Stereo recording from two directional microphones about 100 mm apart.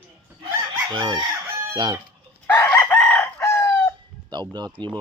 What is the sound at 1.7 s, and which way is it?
Chicken, 50° right (ahead or behind).